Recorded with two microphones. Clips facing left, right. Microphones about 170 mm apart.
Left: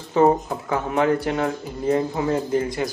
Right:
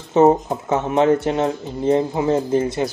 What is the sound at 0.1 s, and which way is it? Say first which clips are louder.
Speech: right 4 dB; 25° right (ahead or behind).